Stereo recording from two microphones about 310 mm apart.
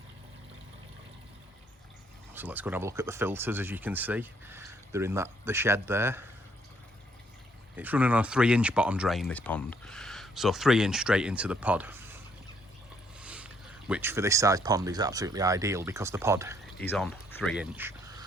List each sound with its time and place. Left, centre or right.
2.3 s speech: centre
7.8 s speech: centre
16.8 s speech: centre